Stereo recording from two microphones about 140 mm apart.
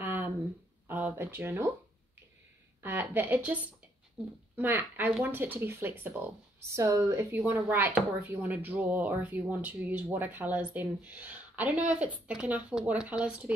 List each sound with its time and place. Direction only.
0.0 s a sound: 15° right (ahead or behind)
0.8 s speech: 15° right (ahead or behind)
2.8 s speech: 15° right (ahead or behind)